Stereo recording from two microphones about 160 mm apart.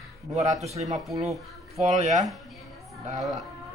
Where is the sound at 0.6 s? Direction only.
40° right (ahead or behind).